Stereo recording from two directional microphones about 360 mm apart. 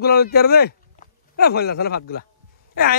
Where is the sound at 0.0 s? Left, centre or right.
Left.